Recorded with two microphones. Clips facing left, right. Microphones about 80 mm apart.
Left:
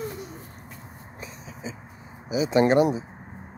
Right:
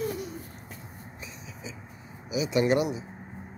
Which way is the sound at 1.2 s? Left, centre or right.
Left.